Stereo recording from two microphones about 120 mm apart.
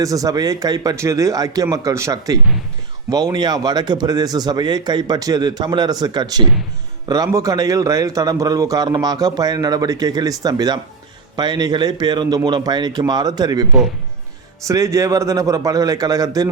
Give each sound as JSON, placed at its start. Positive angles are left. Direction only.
{"t": 0.0, "sound": "a man's voice", "side_deg": -30}
{"t": 14.7, "sound": "speech", "side_deg": -25}